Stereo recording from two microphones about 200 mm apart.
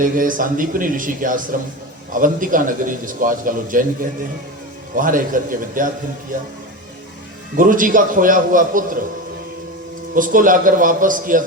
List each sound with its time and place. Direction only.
0.0 s a man's voice: 40° right (ahead or behind)
4.9 s a man's voice: 40° right (ahead or behind)
7.5 s a man's voice: 45° right (ahead or behind)
10.2 s a man's voice: 40° right (ahead or behind)